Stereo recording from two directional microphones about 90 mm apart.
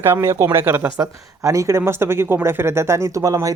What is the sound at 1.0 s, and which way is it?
Speech, 35° right (ahead or behind).